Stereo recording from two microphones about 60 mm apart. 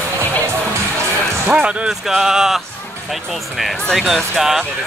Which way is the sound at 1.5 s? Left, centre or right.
Centre.